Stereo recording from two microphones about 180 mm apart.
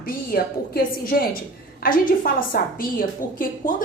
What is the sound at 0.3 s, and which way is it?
A woman's voice, 55° left (ahead or behind).